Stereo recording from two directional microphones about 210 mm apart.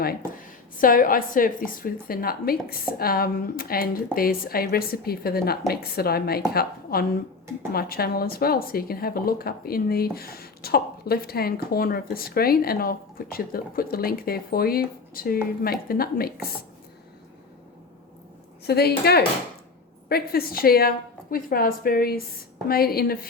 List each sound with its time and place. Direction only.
0.8 s a woman's voice: 40° left (ahead or behind)
18.6 s a woman's voice: 50° left (ahead or behind)